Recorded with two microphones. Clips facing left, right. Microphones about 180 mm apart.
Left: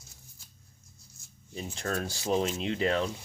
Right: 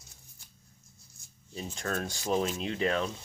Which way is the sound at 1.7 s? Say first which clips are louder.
Left 1 dB; 30° left (ahead or behind).